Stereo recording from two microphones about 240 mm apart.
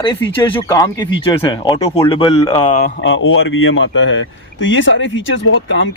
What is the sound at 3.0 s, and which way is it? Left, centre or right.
Speech, left.